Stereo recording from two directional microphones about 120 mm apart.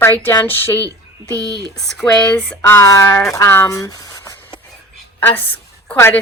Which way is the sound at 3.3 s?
25° left (ahead or behind).